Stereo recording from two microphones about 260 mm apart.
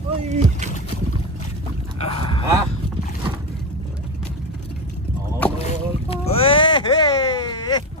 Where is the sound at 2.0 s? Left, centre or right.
Left.